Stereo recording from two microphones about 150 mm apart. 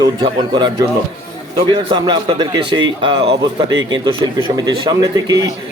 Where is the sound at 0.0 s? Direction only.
25° right (ahead or behind).